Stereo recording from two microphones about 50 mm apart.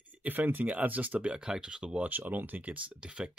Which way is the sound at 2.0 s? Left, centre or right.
Right.